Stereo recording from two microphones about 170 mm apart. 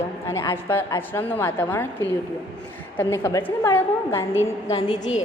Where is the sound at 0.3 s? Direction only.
15° left (ahead or behind).